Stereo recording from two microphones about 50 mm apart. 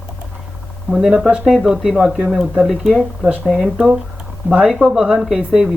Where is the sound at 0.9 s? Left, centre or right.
Centre.